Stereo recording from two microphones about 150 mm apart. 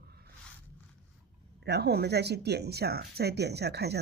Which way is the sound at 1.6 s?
90° right.